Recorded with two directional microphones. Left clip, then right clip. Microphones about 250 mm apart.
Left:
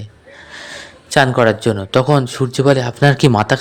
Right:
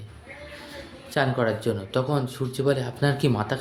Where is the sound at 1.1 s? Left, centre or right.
Left.